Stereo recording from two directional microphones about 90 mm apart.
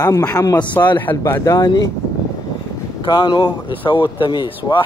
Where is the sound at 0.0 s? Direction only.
40° left (ahead or behind).